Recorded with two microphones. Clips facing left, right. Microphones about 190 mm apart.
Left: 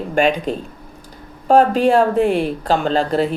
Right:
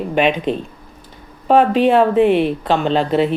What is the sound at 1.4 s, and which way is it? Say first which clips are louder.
Speech: even; centre (ahead or behind).